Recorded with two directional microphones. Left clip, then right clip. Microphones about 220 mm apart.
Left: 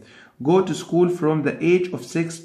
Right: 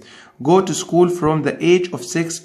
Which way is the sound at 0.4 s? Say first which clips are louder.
Right 4 dB; 25° right (ahead or behind).